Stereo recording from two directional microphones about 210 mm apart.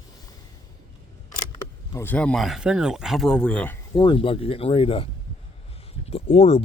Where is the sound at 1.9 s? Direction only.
10° left (ahead or behind).